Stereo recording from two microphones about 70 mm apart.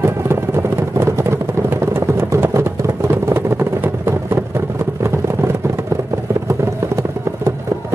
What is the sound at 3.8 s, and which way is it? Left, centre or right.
Vehicle, right.